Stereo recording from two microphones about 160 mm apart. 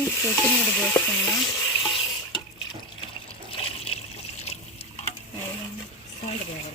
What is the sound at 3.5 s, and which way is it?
Water, 35° left (ahead or behind).